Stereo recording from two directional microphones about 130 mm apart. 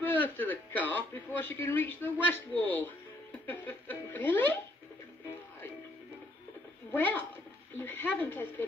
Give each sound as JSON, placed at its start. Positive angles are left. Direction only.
{"t": 0.0, "sound": "a sound", "side_deg": 15}
{"t": 0.8, "sound": "speech", "side_deg": 15}
{"t": 6.9, "sound": "speech", "side_deg": 15}